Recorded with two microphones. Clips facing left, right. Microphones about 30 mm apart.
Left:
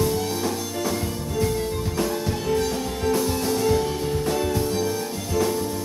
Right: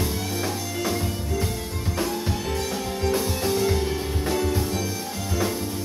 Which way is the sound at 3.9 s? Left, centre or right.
Right.